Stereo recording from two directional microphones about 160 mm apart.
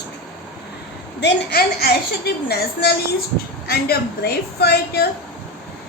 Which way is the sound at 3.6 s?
75° left (ahead or behind).